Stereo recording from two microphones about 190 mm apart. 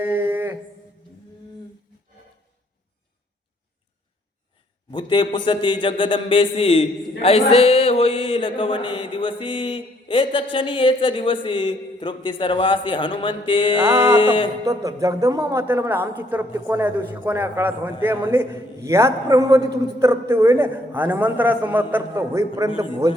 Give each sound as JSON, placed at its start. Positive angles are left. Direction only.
{"t": 0.0, "sound": "a sound", "side_deg": -10}
{"t": 4.9, "sound": "speech", "side_deg": 25}
{"t": 14.6, "sound": "a man's voice", "side_deg": -15}